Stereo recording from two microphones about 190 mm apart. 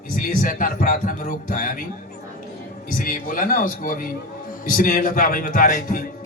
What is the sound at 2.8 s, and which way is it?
A man's voice, 45° left (ahead or behind).